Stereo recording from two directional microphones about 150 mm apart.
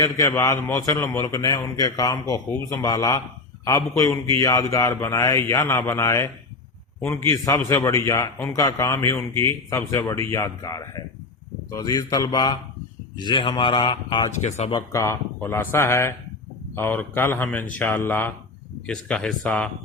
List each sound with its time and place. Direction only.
0.0 s a man's voice: 20° left (ahead or behind)
14.4 s speech: 50° left (ahead or behind)
14.7 s speech: 25° left (ahead or behind); by 19.7 s 5° left (ahead or behind)